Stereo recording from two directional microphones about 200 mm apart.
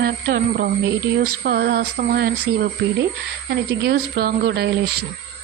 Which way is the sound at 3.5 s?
55° right (ahead or behind).